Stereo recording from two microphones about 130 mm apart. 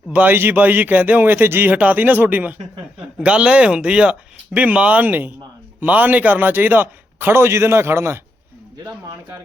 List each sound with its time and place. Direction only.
0.1 s speech: 15° right (ahead or behind)